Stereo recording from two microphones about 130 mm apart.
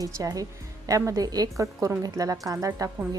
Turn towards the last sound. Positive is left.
turn(degrees=-30)  # may be behind; listen again after turning